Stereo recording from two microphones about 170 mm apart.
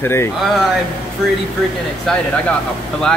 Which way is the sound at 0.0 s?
15° left (ahead or behind).